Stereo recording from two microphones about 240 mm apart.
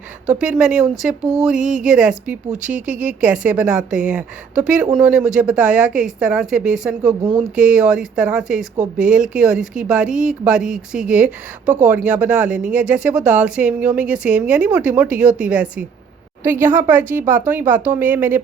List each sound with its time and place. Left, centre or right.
0.3 s speech: centre
1.5 s speech: right
1.9 s speech: centre
2.5 s speech: right
2.8 s speech: centre